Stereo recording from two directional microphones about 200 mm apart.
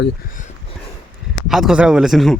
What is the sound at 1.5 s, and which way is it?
Speech, centre (ahead or behind).